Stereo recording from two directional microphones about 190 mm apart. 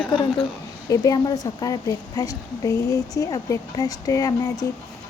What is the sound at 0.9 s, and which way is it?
A woman's voice, 20° left (ahead or behind).